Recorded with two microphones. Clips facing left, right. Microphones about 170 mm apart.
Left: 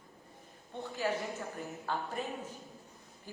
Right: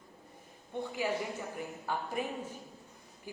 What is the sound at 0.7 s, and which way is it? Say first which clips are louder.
A man's voice: right 1 dB; 15° right (ahead or behind).